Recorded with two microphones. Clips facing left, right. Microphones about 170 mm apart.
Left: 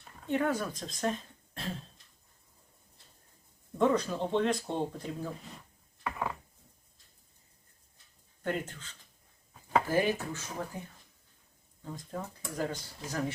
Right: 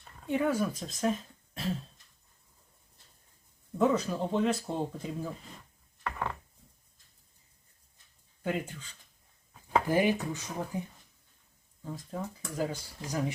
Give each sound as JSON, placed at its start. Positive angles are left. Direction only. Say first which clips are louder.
{"t": 0.3, "sound": "speech", "louder": "right 2 dB", "side_deg": -10}
{"t": 3.8, "sound": "speech", "louder": "even", "side_deg": -5}
{"t": 6.0, "sound": "a sound", "louder": "even", "side_deg": 5}
{"t": 8.4, "sound": "speech", "louder": "right 1 dB", "side_deg": -10}
{"t": 9.5, "sound": "a sound", "louder": "even", "side_deg": 0}
{"t": 9.8, "sound": "speech", "louder": "right 2 dB", "side_deg": -15}
{"t": 11.8, "sound": "speech", "louder": "right 2 dB", "side_deg": -5}